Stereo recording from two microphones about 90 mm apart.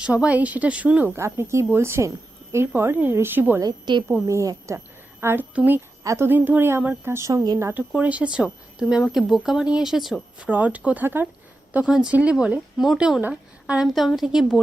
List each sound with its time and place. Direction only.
0.0 s speech: 15° right (ahead or behind)
1.1 s a woman's voice: 30° right (ahead or behind)
3.6 s a woman's voice: 50° right (ahead or behind)
4.3 s a woman's voice: 35° right (ahead or behind)
6.0 s a woman's voice: 35° right (ahead or behind)
6.2 s a woman's voice: 20° right (ahead or behind)
7.7 s speech: 15° right (ahead or behind)
10.4 s speech: 15° right (ahead or behind)